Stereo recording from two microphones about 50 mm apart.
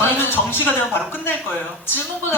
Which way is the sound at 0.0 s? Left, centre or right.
Left.